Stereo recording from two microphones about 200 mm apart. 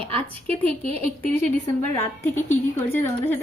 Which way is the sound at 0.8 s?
30° right (ahead or behind).